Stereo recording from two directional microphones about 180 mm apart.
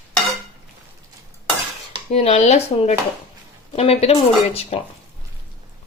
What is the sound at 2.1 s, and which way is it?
Stir, 35° left (ahead or behind).